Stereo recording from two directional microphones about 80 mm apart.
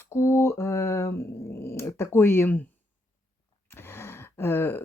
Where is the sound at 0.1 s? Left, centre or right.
Left.